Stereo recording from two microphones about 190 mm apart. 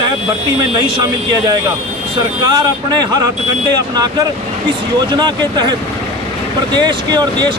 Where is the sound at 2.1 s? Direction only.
20° right (ahead or behind).